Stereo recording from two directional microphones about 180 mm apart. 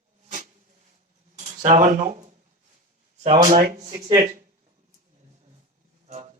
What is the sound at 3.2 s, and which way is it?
Speech, 35° right (ahead or behind).